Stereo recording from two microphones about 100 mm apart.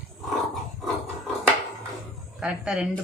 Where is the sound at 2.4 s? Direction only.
10° right (ahead or behind).